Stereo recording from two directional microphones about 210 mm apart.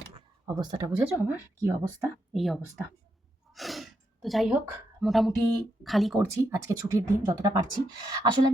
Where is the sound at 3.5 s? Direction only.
Centre (ahead or behind).